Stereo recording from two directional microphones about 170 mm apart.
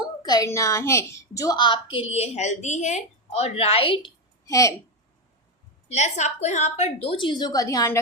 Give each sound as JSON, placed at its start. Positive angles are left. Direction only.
{"t": 0.2, "sound": "a woman's voice", "side_deg": 25}
{"t": 4.4, "sound": "a woman's voice", "side_deg": 20}
{"t": 5.9, "sound": "a woman's voice", "side_deg": 45}